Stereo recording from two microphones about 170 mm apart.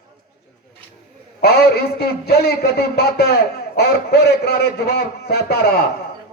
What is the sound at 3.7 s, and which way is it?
A man's voice, 70° left (ahead or behind).